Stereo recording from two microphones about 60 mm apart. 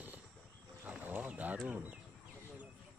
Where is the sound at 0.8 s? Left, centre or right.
Right.